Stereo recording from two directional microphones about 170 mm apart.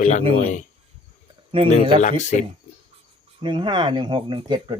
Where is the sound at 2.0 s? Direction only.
45° left (ahead or behind).